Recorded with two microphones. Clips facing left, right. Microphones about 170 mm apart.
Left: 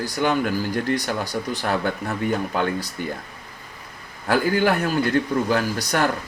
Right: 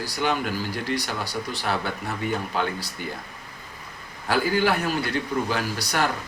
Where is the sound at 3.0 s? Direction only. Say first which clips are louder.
Left 3 dB; 50° left (ahead or behind).